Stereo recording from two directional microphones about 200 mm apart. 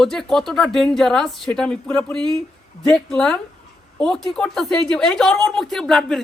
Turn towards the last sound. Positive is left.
turn(degrees=0)  # may be behind; listen again after turning